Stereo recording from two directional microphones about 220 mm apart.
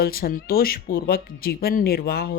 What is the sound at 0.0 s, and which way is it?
Speech, 40° left (ahead or behind).